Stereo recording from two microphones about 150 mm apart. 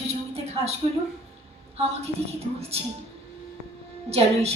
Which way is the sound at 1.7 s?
45° right (ahead or behind).